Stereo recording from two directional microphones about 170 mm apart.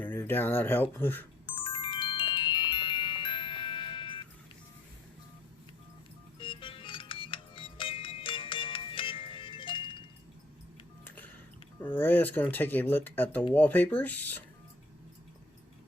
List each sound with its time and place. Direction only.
0.0 s speech: 10° left (ahead or behind)
1.5 s music: 30° left (ahead or behind)
6.4 s music: 30° left (ahead or behind)
11.0 s a sound: 10° left (ahead or behind)
11.8 s speech: 10° left (ahead or behind)